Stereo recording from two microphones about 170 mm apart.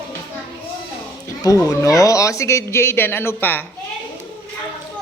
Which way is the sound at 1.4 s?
20° left (ahead or behind).